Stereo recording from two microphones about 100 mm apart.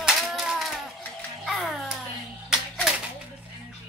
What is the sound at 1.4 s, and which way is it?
Music, centre (ahead or behind).